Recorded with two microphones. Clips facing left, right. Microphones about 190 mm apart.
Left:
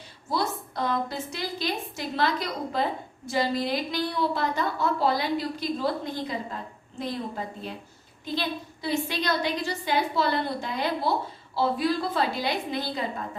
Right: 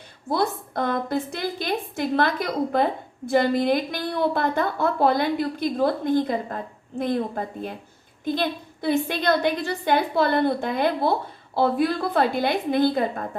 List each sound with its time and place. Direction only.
0.3 s a woman's voice: 55° right (ahead or behind)